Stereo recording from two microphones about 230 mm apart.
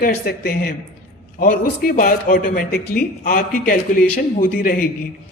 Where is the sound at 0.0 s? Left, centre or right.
Left.